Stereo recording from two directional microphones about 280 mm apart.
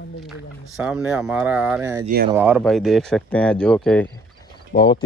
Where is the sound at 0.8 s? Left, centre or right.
Centre.